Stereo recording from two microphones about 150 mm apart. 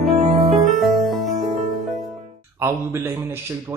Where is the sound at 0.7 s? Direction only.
Centre (ahead or behind).